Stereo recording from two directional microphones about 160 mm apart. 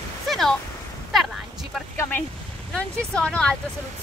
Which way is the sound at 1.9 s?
15° left (ahead or behind).